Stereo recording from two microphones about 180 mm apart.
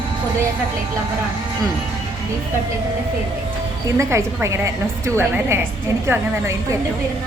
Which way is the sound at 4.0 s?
15° right (ahead or behind).